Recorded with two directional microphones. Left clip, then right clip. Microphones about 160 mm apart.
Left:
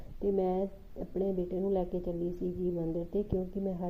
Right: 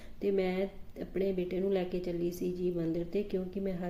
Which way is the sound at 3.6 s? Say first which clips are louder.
Even; 5° right (ahead or behind).